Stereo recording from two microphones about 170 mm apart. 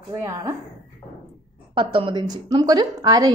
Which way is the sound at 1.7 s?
30° right (ahead or behind).